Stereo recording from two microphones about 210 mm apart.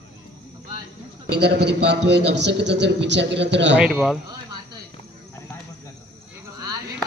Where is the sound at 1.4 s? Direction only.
55° right (ahead or behind).